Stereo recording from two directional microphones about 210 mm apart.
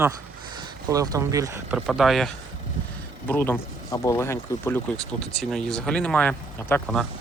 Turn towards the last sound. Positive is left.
turn(degrees=5)  # may be behind; listen again after turning